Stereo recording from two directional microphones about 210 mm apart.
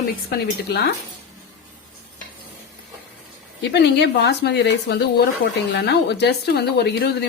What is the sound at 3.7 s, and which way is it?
Speech, 55° left (ahead or behind).